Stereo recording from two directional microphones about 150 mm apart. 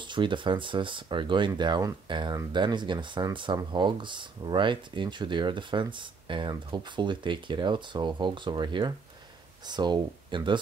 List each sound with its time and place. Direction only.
0.0 s speech: 30° right (ahead or behind)